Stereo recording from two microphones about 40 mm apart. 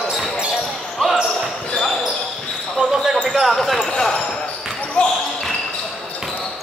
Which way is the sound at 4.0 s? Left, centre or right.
Centre.